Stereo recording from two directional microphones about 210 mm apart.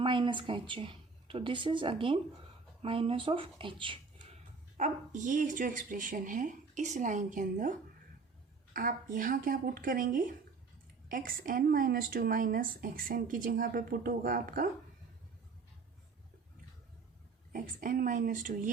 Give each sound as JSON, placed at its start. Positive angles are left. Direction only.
{"t": 0.0, "sound": "speech", "side_deg": -25}
{"t": 4.8, "sound": "a woman's voice", "side_deg": -35}
{"t": 8.7, "sound": "a woman's voice", "side_deg": -40}
{"t": 17.5, "sound": "a woman's voice", "side_deg": -40}